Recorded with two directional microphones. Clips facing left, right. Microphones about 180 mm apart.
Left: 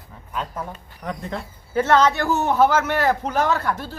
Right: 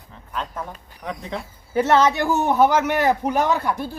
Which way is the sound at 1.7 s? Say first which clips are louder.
Even; 15° right (ahead or behind).